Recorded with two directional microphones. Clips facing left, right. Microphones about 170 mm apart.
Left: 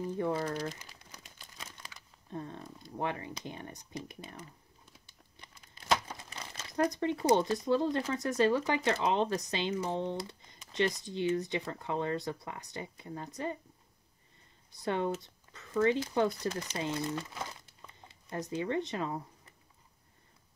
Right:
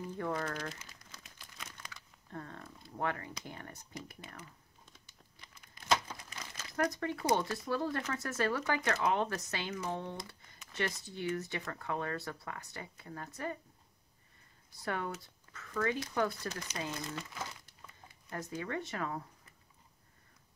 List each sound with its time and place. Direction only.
0.2 s speech: 25° left (ahead or behind)
2.3 s speech: 20° left (ahead or behind)
5.8 s a sound: 30° left (ahead or behind)
6.7 s speech: 20° left (ahead or behind)
14.9 s speech: 25° left (ahead or behind)